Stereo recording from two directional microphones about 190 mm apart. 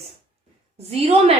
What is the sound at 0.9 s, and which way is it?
Speech, 30° right (ahead or behind).